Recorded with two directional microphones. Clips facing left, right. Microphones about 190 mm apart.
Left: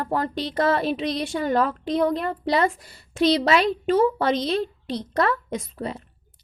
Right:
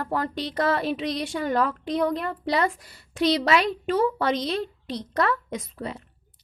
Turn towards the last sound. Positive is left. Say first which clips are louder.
# left 3 dB
turn(degrees=30)  # may be behind; listen again after turning